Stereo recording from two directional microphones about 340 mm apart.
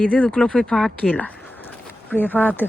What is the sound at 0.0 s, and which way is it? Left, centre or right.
Speech, centre.